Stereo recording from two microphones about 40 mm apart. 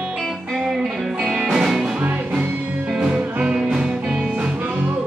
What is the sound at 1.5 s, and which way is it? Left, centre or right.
Music, centre.